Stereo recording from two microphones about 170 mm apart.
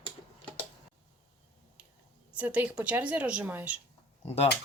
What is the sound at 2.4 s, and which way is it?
A woman's voice, 10° right (ahead or behind).